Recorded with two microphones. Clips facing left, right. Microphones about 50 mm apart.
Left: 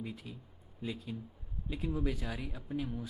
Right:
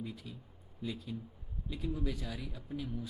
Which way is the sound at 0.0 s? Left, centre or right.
Left.